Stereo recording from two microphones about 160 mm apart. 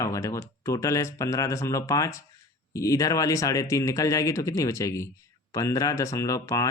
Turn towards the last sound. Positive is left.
turn(degrees=20)  # may be behind; listen again after turning